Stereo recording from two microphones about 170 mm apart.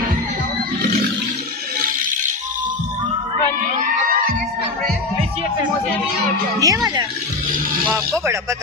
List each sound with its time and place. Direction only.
6.6 s speech: 20° right (ahead or behind)